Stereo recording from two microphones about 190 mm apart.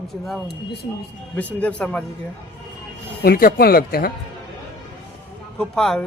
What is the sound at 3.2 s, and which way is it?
Speech, 50° left (ahead or behind).